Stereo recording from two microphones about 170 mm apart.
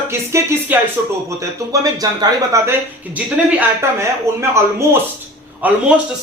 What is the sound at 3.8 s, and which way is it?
A man's voice, 15° right (ahead or behind).